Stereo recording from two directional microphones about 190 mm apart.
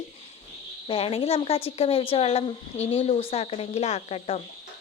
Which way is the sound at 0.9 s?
30° left (ahead or behind).